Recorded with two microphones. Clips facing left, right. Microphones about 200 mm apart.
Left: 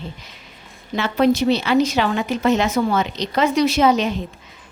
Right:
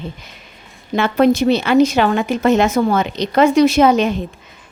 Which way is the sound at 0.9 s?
55° right (ahead or behind).